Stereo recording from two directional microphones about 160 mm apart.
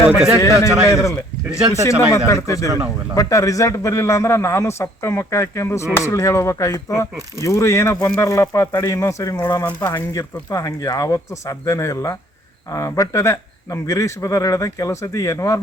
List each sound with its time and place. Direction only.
0.1 s a man's voice: 10° right (ahead or behind)
0.3 s speech: 20° left (ahead or behind)
2.6 s speech: 20° right (ahead or behind)
3.2 s a man's voice: 20° left (ahead or behind)